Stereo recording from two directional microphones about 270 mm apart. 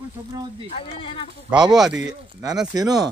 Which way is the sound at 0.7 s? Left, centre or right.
Left.